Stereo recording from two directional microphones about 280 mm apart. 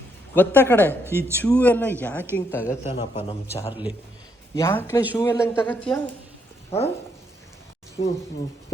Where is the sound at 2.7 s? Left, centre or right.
Centre.